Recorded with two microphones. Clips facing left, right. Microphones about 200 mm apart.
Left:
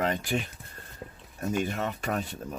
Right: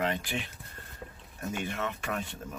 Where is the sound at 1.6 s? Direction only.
40° left (ahead or behind).